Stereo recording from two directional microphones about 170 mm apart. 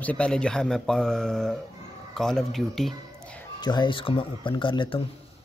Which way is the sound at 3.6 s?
25° left (ahead or behind).